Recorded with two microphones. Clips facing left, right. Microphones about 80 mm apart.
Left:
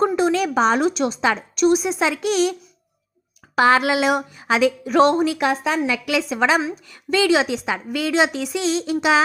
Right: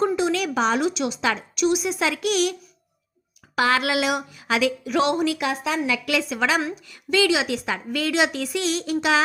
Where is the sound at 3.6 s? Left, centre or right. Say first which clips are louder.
Left 5 dB; left.